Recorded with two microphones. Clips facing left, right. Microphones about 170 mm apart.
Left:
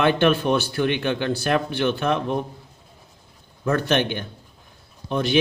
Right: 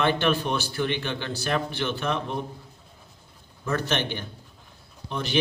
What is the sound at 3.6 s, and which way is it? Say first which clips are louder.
A man's voice: left 6 dB; 55° left (ahead or behind).